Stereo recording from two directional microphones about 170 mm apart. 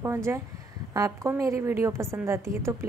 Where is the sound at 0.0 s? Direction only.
15° right (ahead or behind).